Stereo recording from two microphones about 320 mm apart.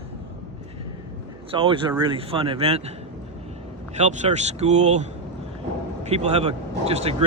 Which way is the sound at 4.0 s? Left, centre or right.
Right.